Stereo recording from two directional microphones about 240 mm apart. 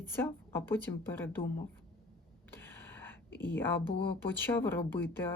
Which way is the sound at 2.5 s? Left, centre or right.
Centre.